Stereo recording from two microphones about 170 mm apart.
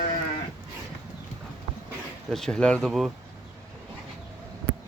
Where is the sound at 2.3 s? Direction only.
5° left (ahead or behind).